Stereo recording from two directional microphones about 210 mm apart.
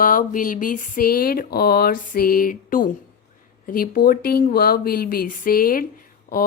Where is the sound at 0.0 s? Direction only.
40° left (ahead or behind).